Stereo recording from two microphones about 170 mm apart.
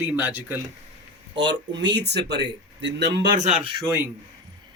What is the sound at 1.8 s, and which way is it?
Speech, 90° right.